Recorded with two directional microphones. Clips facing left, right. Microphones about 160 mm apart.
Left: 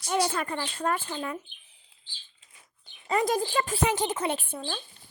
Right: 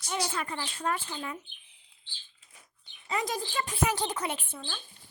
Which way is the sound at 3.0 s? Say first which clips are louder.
Left 7 dB; 50° left (ahead or behind).